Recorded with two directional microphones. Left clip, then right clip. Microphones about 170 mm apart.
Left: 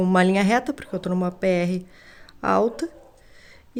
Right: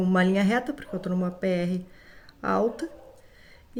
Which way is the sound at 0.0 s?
50° left (ahead or behind).